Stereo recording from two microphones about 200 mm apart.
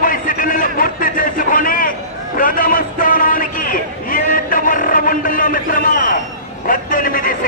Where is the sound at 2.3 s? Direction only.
45° left (ahead or behind).